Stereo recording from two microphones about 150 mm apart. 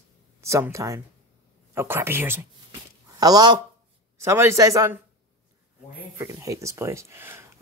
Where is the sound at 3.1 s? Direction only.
25° right (ahead or behind).